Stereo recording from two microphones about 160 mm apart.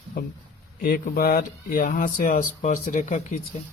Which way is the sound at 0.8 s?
60° left (ahead or behind).